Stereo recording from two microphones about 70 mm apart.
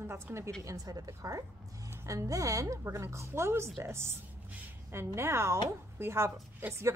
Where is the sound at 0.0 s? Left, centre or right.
Right.